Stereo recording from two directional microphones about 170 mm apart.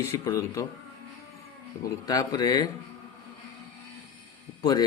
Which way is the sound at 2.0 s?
20° left (ahead or behind).